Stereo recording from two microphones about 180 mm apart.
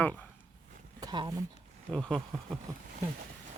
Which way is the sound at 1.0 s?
25° right (ahead or behind).